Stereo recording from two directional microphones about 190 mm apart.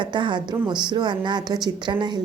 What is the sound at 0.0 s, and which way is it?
A woman's voice, 25° right (ahead or behind).